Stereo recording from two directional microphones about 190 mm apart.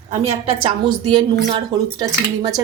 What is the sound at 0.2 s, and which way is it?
Speech, 30° right (ahead or behind).